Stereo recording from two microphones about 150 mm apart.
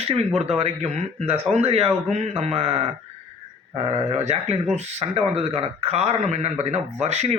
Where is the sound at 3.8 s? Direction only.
50° right (ahead or behind).